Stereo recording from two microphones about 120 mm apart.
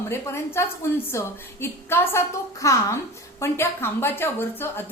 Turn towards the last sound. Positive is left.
turn(degrees=20)  # may be behind; listen again after turning